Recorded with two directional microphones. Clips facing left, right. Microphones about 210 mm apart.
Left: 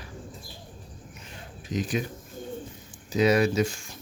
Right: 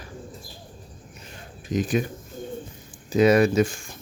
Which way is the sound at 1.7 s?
50° right (ahead or behind).